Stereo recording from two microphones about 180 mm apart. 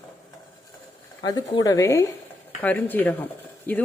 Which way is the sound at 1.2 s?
20° left (ahead or behind).